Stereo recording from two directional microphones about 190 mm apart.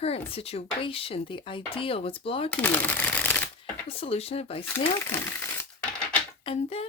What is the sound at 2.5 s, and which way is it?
Speech, 10° left (ahead or behind).